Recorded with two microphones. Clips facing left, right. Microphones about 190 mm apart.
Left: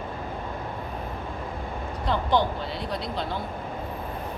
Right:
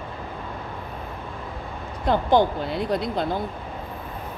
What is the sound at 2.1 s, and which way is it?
Speech, 45° right (ahead or behind).